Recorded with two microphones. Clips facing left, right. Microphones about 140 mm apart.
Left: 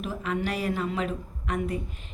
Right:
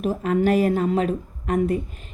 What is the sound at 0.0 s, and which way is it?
A woman's voice, 45° right (ahead or behind).